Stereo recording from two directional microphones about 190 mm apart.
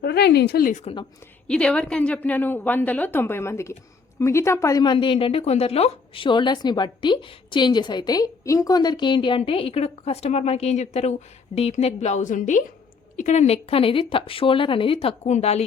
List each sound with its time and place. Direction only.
0.0 s speech: 60° left (ahead or behind); by 0.9 s 40° left (ahead or behind)
1.5 s a woman's voice: 5° left (ahead or behind); by 15.6 s 35° left (ahead or behind)